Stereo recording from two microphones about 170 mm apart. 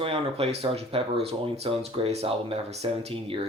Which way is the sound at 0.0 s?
35° right (ahead or behind).